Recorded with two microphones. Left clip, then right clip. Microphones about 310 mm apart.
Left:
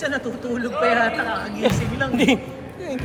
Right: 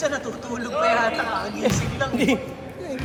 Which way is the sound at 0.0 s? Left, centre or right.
Centre.